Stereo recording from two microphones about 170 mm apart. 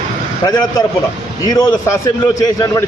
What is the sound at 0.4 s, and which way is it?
A man's voice, 25° left (ahead or behind).